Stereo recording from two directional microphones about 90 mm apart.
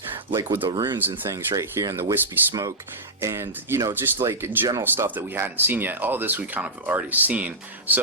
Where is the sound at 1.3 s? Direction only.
40° right (ahead or behind).